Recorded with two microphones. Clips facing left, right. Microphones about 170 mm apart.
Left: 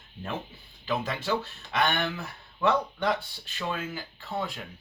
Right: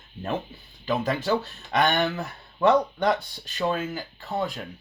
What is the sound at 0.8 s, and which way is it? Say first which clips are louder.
Speech: right 5 dB; 40° right (ahead or behind).